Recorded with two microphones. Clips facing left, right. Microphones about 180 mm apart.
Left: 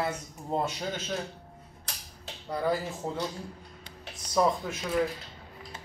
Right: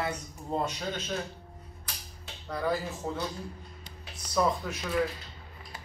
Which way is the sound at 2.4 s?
20° left (ahead or behind).